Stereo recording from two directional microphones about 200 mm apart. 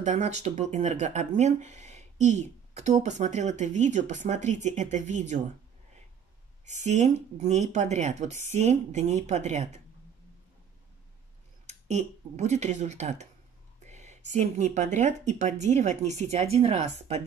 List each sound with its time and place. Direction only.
0.0 s speech: 35° right (ahead or behind)
6.6 s speech: 35° right (ahead or behind)
11.6 s speech: 35° right (ahead or behind)
13.8 s a sound: 35° right (ahead or behind)
14.3 s speech: 35° right (ahead or behind)